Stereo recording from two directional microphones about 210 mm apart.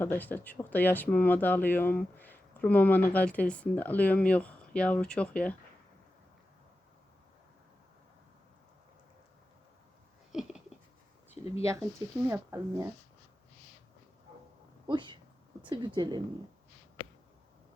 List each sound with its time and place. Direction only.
0.0 s speech: 10° left (ahead or behind)
10.3 s a sound: centre (ahead or behind)
11.6 s speech: 15° right (ahead or behind)
14.8 s speech: 20° right (ahead or behind)